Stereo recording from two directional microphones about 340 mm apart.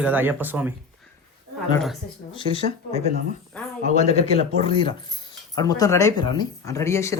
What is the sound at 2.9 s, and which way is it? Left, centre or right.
Speech, centre.